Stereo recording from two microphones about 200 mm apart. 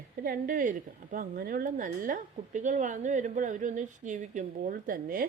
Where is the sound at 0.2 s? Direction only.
45° right (ahead or behind).